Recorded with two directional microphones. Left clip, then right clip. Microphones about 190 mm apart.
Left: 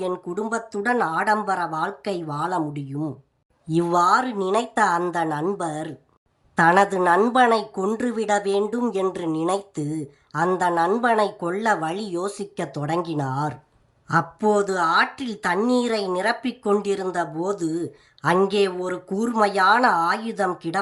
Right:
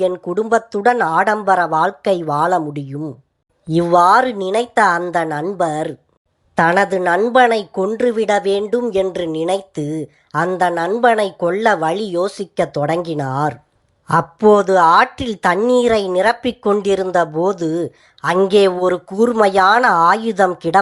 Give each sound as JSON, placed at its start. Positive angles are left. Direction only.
{"t": 0.3, "sound": "speech", "side_deg": -15}